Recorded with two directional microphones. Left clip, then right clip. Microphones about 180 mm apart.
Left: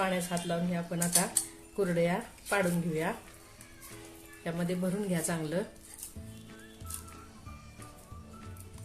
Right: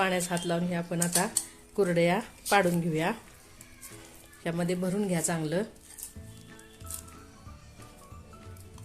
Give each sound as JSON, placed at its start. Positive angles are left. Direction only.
{"t": 0.0, "sound": "speech", "side_deg": -40}
{"t": 4.4, "sound": "speech", "side_deg": -35}